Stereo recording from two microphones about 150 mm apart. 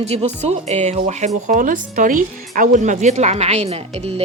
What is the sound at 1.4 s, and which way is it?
A woman's voice, 60° right (ahead or behind).